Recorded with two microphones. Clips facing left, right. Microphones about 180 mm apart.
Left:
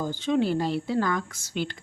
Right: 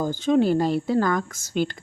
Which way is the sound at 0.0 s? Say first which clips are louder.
Right 5 dB; 45° right (ahead or behind).